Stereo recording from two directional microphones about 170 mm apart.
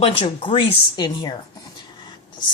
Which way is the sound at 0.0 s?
30° left (ahead or behind).